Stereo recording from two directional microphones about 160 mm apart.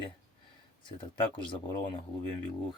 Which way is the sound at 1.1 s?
30° left (ahead or behind).